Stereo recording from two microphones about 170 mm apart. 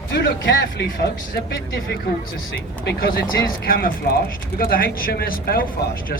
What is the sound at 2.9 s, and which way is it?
Speech, 60° left (ahead or behind).